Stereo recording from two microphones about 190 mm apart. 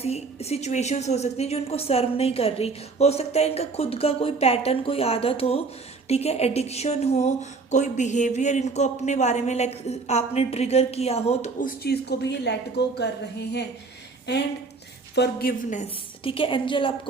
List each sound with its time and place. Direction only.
0.0 s a woman's voice: 35° left (ahead or behind)
11.6 s speech: 55° left (ahead or behind)
15.1 s speech: 55° left (ahead or behind)
15.8 s a woman's voice: 30° left (ahead or behind)